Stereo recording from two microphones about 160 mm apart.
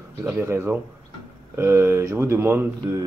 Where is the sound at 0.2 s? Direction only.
15° right (ahead or behind).